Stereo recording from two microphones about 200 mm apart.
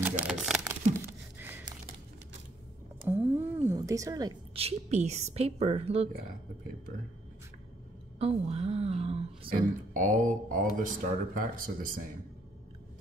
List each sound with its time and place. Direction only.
0.0 s a sound: 10° right (ahead or behind)
3.1 s speech: 10° right (ahead or behind); by 6.0 s 30° right (ahead or behind)
8.2 s a woman's voice: 30° right (ahead or behind)